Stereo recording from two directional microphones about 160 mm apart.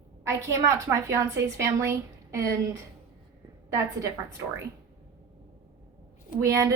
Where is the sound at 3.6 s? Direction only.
20° right (ahead or behind).